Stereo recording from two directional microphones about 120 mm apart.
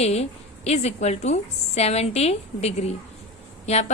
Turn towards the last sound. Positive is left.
turn(degrees=65)  # may be behind; listen again after turning